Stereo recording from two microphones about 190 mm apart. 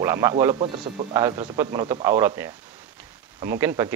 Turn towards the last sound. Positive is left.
turn(degrees=-15)  # may be behind; listen again after turning